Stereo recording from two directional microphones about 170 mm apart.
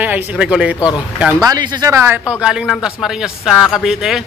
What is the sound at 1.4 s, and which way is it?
Speech, 25° right (ahead or behind).